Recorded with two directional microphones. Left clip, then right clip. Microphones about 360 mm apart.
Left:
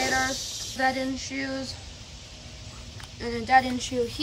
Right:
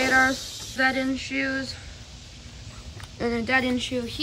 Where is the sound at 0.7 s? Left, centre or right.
Right.